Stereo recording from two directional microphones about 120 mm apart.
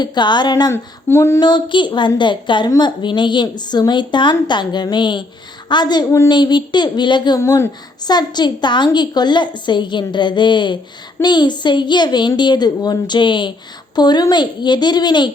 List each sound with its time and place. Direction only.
0.0 s a woman's voice: 40° left (ahead or behind)
0.7 s a sound: 20° left (ahead or behind)
1.4 s a woman's voice: 40° left (ahead or behind)
7.3 s a woman's voice: 25° left (ahead or behind)